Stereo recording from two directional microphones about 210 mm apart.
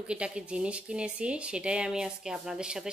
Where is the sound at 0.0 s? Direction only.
5° right (ahead or behind).